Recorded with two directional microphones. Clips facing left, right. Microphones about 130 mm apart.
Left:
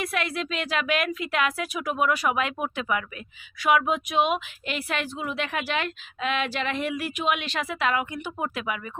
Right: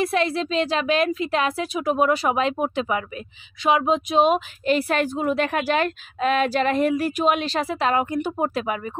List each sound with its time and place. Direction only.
0.0 s a woman's voice: 30° right (ahead or behind)